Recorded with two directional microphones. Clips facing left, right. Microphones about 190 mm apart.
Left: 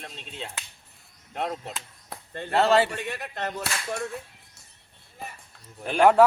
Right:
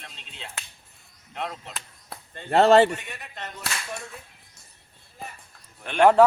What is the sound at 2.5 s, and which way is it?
Speech, 40° right (ahead or behind).